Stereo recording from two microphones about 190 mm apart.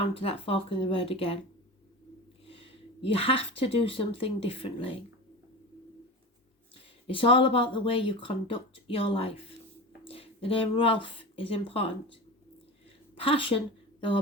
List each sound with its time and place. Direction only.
0.1 s speech: 30° left (ahead or behind)
2.5 s speech: 30° left (ahead or behind)
7.1 s speech: 30° left (ahead or behind)
13.1 s a woman's voice: 30° left (ahead or behind)